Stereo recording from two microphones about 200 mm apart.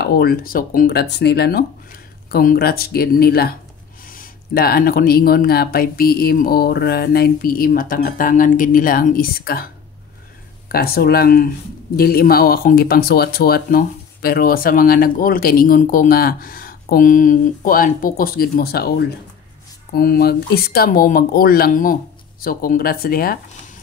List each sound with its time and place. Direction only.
0.0 s speech: 50° left (ahead or behind)
10.7 s speech: 50° left (ahead or behind)